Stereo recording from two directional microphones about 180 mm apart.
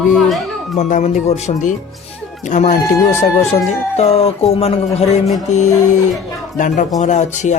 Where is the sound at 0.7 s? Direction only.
45° left (ahead or behind).